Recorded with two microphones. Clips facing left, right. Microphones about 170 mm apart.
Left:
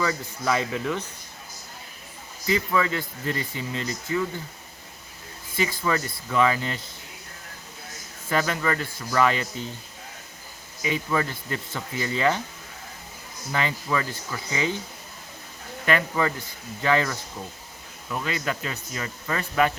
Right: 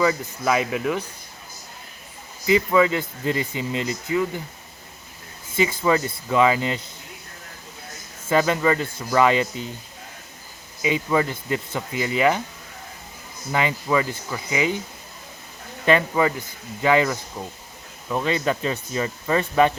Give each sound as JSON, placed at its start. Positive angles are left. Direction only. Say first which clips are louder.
{"t": 0.0, "sound": "speech", "louder": "right 5 dB", "side_deg": -15}
{"t": 2.5, "sound": "speech", "louder": "right 6 dB", "side_deg": -15}
{"t": 5.5, "sound": "speech", "louder": "right 5 dB", "side_deg": -20}
{"t": 8.3, "sound": "speech", "louder": "right 6 dB", "side_deg": -20}
{"t": 10.8, "sound": "speech", "louder": "right 4 dB", "side_deg": -15}
{"t": 13.5, "sound": "speech", "louder": "right 4 dB", "side_deg": -15}
{"t": 15.9, "sound": "speech", "louder": "right 5 dB", "side_deg": -15}
{"t": 18.1, "sound": "speech", "louder": "right 6 dB", "side_deg": -25}